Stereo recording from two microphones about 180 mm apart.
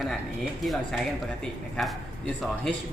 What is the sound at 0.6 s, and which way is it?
Speech, centre (ahead or behind).